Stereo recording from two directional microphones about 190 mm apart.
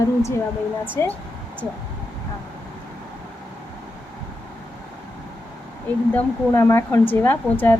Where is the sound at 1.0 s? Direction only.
15° left (ahead or behind).